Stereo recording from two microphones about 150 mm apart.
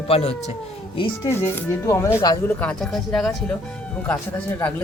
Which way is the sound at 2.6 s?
5° left (ahead or behind).